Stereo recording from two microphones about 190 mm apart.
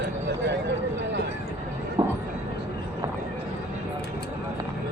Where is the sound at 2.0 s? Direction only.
25° right (ahead or behind).